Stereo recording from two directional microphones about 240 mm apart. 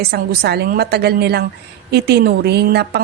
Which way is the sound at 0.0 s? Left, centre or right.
Right.